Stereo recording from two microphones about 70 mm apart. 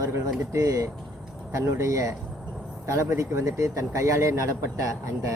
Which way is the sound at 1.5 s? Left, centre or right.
Right.